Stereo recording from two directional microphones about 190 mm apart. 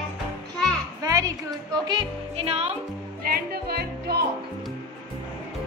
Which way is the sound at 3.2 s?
50° right (ahead or behind).